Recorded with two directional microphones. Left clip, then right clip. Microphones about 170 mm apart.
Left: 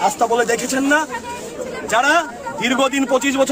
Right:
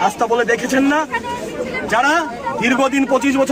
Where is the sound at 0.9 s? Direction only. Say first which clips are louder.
Even; 50° left (ahead or behind).